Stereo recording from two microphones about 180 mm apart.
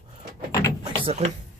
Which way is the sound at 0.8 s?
35° right (ahead or behind).